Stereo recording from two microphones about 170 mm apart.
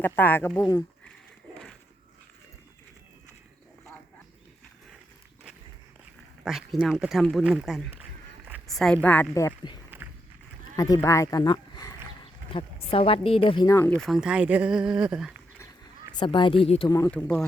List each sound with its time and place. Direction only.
0.0 s speech: 10° left (ahead or behind)
6.4 s speech: centre (ahead or behind); by 9.7 s 20° left (ahead or behind)
10.8 s speech: 20° left (ahead or behind)
12.5 s speech: 35° left (ahead or behind)
13.7 s speech: 15° left (ahead or behind)
13.9 s speech: centre (ahead or behind)
16.1 s speech: 30° left (ahead or behind)
17.1 s speech: 5° left (ahead or behind)